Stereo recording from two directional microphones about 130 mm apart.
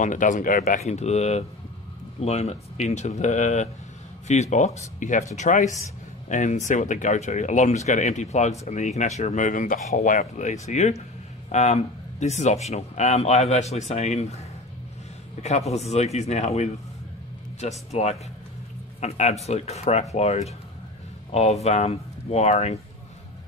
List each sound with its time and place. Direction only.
0.0 s speech: 85° left; by 14.4 s 60° left (ahead or behind)
15.4 s speech: 60° left (ahead or behind)